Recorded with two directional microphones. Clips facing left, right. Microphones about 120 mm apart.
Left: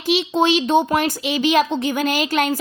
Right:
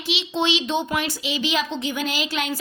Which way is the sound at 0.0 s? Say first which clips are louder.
Left 7 dB; 45° left (ahead or behind).